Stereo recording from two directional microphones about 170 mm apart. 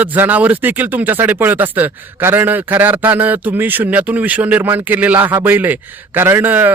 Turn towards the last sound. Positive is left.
turn(degrees=-10)  # may be behind; listen again after turning